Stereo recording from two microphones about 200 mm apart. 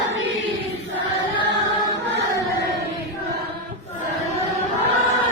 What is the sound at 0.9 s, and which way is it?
Choir, 65° right (ahead or behind).